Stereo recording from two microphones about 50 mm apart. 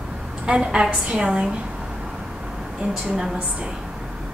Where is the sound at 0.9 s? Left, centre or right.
Right.